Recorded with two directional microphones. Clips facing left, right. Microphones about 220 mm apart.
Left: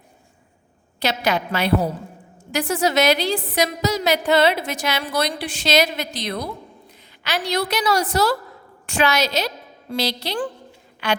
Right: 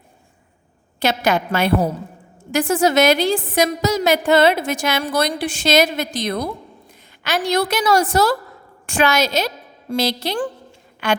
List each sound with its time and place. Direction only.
0.9 s a woman's voice: 50° right (ahead or behind)